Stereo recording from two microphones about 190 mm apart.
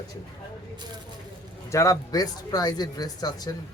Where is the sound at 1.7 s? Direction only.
15° left (ahead or behind).